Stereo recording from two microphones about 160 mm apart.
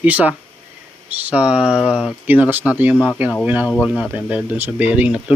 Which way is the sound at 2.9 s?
10° left (ahead or behind).